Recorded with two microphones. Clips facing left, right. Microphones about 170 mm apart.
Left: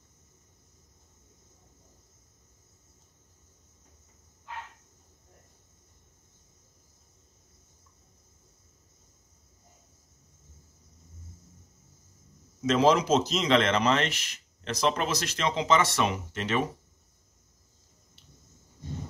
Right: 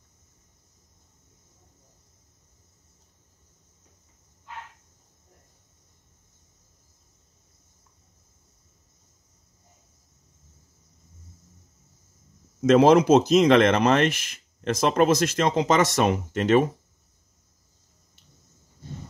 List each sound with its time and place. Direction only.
12.6 s speech: 55° right (ahead or behind)